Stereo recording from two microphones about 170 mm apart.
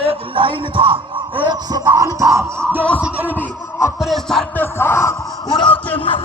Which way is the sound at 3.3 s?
15° left (ahead or behind).